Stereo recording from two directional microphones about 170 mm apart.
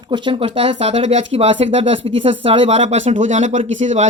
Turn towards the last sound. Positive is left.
turn(degrees=-45)  # may be behind; listen again after turning